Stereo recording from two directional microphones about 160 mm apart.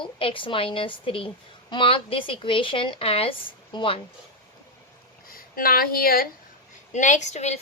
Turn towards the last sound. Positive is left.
turn(degrees=45)  # may be behind; listen again after turning